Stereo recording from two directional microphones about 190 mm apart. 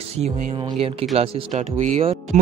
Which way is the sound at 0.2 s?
30° right (ahead or behind).